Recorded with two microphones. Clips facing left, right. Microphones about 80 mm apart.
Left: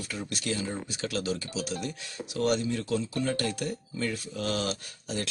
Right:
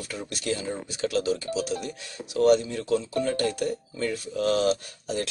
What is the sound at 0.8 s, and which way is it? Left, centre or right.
Speech, right.